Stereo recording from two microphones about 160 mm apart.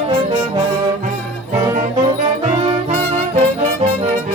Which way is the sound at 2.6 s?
40° right (ahead or behind).